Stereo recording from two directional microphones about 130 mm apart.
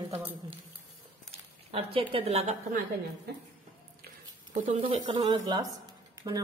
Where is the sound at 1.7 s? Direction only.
45° right (ahead or behind).